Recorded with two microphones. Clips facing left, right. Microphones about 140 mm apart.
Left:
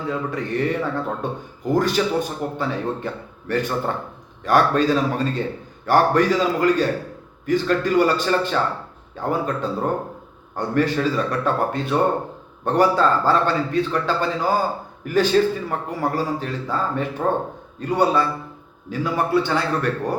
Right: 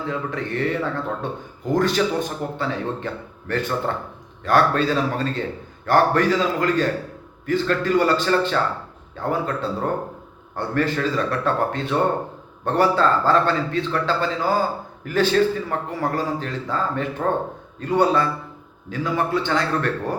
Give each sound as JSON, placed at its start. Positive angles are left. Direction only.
{"t": 0.1, "sound": "speech", "side_deg": 10}